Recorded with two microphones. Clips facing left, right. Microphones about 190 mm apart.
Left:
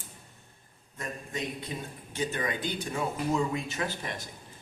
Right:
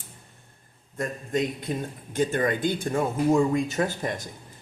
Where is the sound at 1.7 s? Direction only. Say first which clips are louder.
Right 8 dB; 50° right (ahead or behind).